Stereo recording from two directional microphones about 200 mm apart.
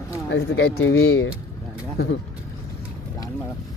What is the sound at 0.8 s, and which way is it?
Speech, 90° left.